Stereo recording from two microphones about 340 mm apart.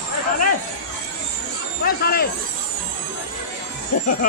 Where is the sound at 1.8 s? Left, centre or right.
Left.